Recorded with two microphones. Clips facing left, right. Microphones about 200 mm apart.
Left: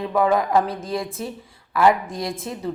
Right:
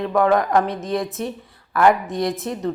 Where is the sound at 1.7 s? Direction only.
Centre (ahead or behind).